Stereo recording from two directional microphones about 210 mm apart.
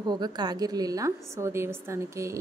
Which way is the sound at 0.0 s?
20° right (ahead or behind).